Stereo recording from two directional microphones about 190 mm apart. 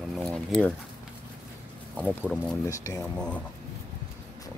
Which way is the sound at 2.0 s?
5° right (ahead or behind).